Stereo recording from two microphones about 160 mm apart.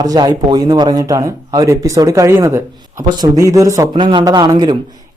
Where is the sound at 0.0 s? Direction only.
25° right (ahead or behind).